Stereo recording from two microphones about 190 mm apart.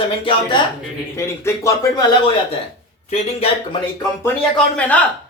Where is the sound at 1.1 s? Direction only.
15° left (ahead or behind).